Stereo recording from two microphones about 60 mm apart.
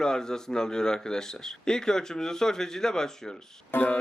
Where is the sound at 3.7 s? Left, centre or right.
Left.